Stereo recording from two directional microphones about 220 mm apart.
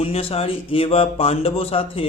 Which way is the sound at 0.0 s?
25° left (ahead or behind).